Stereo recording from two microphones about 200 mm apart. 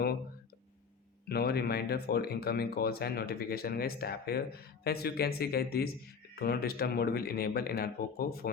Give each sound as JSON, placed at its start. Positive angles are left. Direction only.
{"t": 1.3, "sound": "speech", "side_deg": 55}